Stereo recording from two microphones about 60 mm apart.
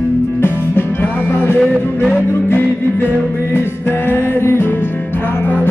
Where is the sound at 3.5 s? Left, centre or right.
Left.